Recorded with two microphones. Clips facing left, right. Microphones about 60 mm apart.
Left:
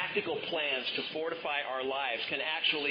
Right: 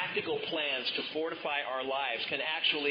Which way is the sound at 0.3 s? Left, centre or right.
Centre.